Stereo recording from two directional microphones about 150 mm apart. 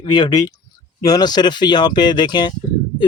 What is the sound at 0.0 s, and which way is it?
Speech, 30° left (ahead or behind).